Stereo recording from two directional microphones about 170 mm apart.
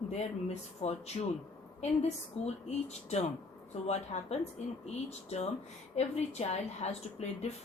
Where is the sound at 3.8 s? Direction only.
40° left (ahead or behind).